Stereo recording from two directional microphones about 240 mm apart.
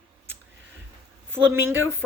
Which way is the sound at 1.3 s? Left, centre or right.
Centre.